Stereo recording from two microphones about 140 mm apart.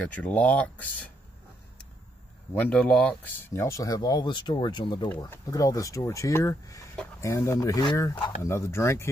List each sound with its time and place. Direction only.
0.0 s speech: 10° left (ahead or behind)
2.6 s speech: 10° left (ahead or behind)